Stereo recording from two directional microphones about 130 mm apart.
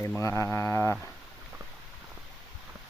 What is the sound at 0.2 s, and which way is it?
Speech, 25° left (ahead or behind).